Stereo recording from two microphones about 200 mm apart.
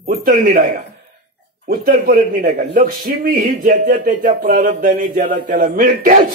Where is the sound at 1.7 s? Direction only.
45° right (ahead or behind).